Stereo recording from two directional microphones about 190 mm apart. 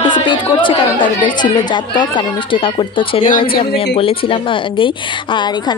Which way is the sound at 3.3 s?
45° left (ahead or behind).